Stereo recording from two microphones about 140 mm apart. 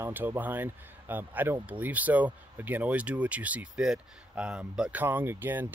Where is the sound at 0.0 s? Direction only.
15° right (ahead or behind).